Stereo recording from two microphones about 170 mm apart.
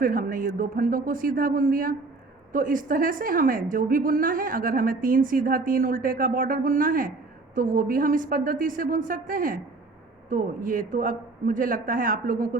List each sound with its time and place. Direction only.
0.0 s a woman's voice: 55° right (ahead or behind)